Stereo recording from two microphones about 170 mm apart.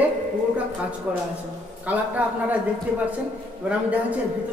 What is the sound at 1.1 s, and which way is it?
A man's voice, 5° right (ahead or behind).